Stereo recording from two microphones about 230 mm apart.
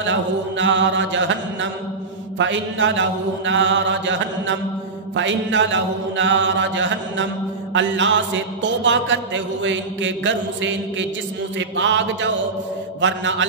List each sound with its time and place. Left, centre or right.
0.6 s a man's voice: right
2.3 s mantra: right
5.1 s a man's voice: right